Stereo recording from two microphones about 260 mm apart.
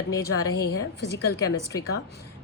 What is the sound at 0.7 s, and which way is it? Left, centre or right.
Speech, left.